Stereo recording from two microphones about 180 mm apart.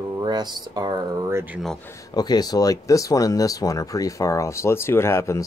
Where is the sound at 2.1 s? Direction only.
20° left (ahead or behind).